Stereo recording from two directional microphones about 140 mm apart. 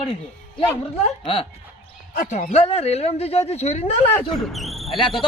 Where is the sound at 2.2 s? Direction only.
60° left (ahead or behind).